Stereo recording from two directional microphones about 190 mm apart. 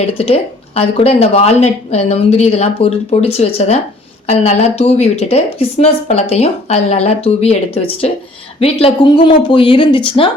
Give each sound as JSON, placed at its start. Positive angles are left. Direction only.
{"t": 0.1, "sound": "a woman's voice", "side_deg": 35}